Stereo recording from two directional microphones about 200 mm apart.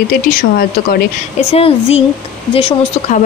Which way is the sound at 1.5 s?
30° left (ahead or behind).